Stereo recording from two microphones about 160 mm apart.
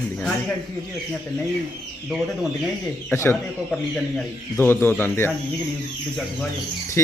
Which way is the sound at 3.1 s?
15° left (ahead or behind).